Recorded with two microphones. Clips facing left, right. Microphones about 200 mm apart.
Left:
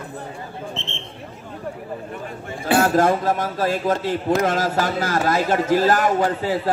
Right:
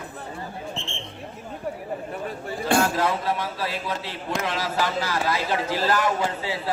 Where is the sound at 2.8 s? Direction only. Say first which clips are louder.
Left 6 dB; 45° left (ahead or behind).